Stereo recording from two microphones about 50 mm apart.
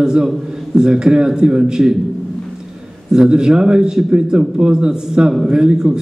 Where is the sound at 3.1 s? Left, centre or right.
Centre.